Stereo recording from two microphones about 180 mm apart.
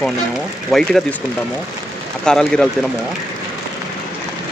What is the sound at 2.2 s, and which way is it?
Speech, 5° left (ahead or behind).